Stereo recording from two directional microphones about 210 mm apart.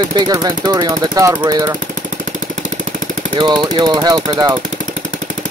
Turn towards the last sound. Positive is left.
turn(degrees=-20)  # may be behind; listen again after turning